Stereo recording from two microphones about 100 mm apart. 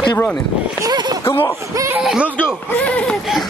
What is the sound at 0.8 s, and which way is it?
Speech, 40° right (ahead or behind).